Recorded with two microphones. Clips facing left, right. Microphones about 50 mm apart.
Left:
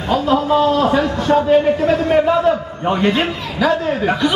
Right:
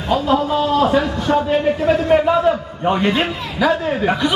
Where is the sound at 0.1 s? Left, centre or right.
Centre.